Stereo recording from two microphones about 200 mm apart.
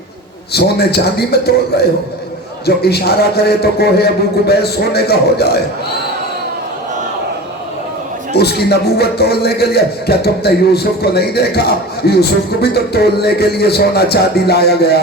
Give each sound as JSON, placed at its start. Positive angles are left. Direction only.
{"t": 0.5, "sound": "music", "side_deg": 55}
{"t": 2.6, "sound": "music", "side_deg": 55}
{"t": 8.4, "sound": "music", "side_deg": 55}